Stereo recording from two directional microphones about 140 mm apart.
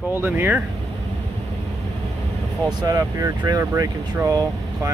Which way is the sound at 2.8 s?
25° right (ahead or behind).